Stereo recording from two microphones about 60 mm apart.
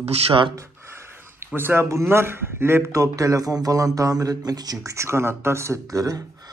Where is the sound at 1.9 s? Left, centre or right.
Right.